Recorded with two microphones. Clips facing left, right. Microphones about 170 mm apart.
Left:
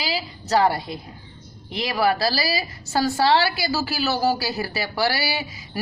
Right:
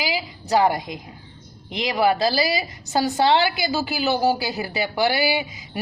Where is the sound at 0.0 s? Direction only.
15° right (ahead or behind).